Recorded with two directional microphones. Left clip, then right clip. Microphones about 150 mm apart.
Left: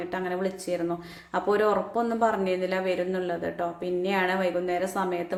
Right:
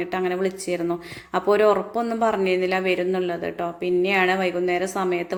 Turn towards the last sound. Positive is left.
turn(degrees=-20)  # may be behind; listen again after turning